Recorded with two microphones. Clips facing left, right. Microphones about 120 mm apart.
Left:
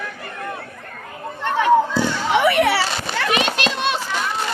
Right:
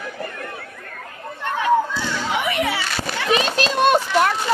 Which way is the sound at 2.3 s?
80° left.